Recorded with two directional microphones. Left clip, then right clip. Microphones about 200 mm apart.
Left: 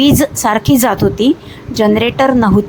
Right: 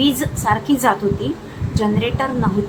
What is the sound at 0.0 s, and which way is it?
Speech, 50° left (ahead or behind).